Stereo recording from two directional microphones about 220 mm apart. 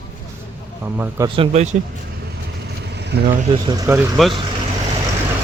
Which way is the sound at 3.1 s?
50° right (ahead or behind).